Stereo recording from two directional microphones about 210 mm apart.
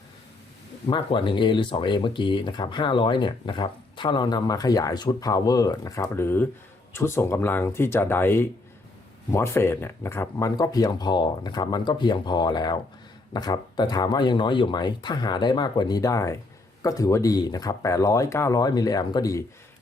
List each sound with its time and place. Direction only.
0.9 s speech: 25° left (ahead or behind)